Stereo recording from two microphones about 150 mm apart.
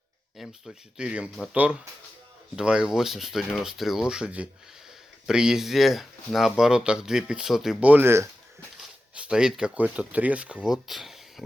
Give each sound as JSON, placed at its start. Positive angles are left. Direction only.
{"t": 0.3, "sound": "speech", "side_deg": 0}
{"t": 8.8, "sound": "speech", "side_deg": -5}